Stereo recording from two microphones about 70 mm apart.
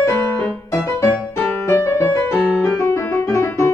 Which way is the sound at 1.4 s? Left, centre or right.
Left.